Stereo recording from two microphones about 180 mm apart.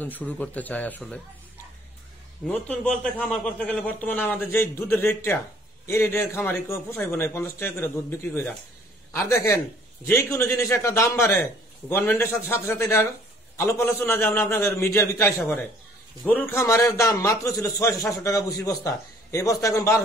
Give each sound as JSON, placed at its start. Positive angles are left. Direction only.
{"t": 0.0, "sound": "a man's voice", "side_deg": 10}
{"t": 2.4, "sound": "a man's voice", "side_deg": 10}